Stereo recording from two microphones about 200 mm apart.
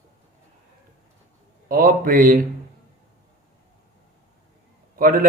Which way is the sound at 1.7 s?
45° right (ahead or behind).